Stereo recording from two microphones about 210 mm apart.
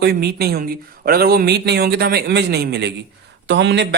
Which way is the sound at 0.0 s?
50° right (ahead or behind).